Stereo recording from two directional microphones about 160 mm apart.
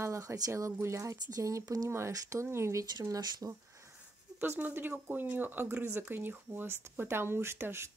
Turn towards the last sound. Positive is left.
turn(degrees=-15)  # may be behind; listen again after turning